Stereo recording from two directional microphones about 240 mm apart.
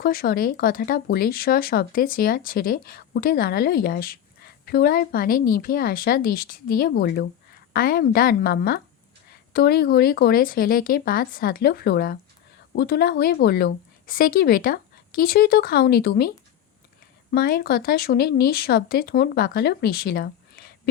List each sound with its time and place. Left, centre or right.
0.0 s speech: left
17.3 s speech: left